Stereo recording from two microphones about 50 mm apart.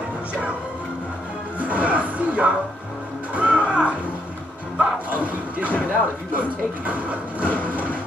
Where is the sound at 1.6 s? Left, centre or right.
Right.